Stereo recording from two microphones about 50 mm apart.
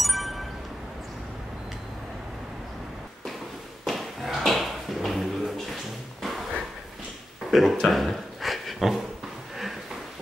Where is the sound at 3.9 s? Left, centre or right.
Centre.